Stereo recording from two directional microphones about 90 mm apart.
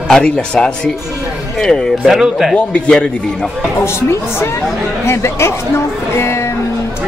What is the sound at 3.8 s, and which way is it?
Speech, 30° left (ahead or behind).